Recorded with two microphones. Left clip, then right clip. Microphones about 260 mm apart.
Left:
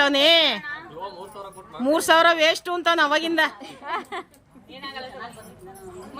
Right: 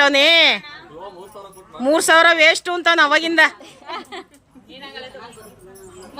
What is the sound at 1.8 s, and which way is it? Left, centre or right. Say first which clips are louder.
Speech: right 4 dB; centre.